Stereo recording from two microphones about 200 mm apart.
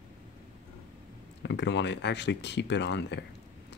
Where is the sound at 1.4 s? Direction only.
60° left (ahead or behind).